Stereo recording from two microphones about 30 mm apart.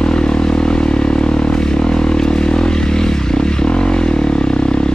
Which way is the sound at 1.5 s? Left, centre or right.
Left.